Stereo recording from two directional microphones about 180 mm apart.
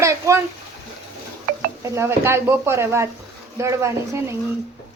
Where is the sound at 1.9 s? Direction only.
15° right (ahead or behind).